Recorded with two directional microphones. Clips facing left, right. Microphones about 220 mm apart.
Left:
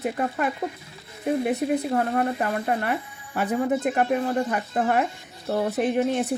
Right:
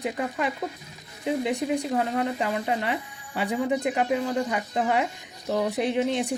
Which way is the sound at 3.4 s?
15° right (ahead or behind).